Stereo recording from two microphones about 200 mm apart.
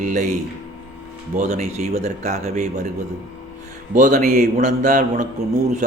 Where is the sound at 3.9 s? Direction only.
40° right (ahead or behind).